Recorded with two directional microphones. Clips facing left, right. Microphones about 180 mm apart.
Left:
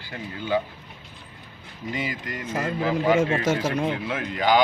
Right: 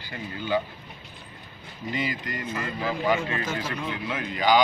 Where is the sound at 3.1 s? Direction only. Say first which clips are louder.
Left 7 dB; 90° left.